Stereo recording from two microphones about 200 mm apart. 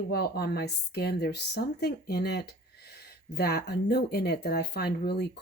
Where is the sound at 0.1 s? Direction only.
55° left (ahead or behind).